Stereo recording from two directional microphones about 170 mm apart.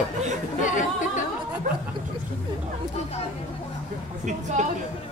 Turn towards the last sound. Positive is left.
turn(degrees=-45)  # may be behind; listen again after turning